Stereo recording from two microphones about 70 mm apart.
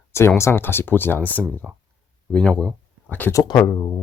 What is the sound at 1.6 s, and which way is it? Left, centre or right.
Speech, centre.